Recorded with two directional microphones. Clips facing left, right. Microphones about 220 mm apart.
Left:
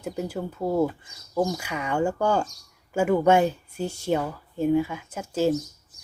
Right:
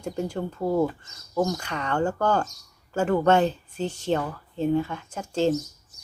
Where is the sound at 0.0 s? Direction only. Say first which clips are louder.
Right 1 dB; 5° left (ahead or behind).